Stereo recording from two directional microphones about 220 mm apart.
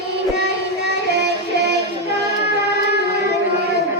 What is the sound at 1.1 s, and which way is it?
Music, 50° right (ahead or behind).